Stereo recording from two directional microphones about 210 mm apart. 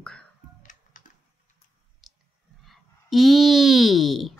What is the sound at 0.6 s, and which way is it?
Music, 35° left (ahead or behind).